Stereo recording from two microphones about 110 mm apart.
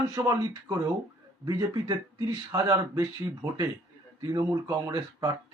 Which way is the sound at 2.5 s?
30° right (ahead or behind).